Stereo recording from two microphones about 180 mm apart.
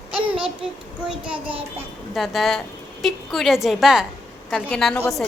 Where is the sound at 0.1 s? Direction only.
30° right (ahead or behind).